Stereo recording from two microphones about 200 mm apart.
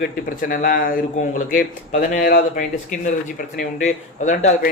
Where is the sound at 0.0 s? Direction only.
45° left (ahead or behind).